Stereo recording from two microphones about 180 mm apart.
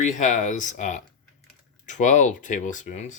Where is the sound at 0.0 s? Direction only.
45° left (ahead or behind).